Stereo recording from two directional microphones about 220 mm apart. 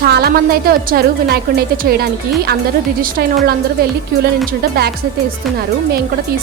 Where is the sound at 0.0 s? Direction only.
45° right (ahead or behind).